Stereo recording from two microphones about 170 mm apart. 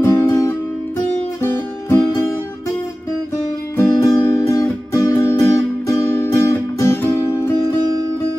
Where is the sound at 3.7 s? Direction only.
15° left (ahead or behind).